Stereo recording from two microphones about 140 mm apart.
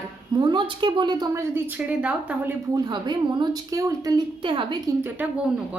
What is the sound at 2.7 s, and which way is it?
A woman's voice, 30° right (ahead or behind).